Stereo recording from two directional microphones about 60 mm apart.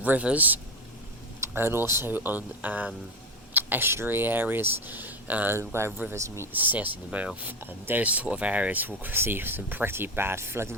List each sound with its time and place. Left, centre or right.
0.0 s speech: right
1.5 s speech: right
2.1 s speech: right
5.5 s speech: right
6.5 s speech: right
9.0 s speech: right